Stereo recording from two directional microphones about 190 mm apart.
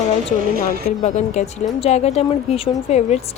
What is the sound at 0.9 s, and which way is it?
A woman's voice, 40° left (ahead or behind).